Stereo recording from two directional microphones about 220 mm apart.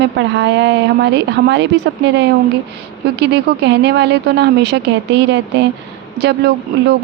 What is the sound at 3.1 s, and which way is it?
Speech, 50° right (ahead or behind).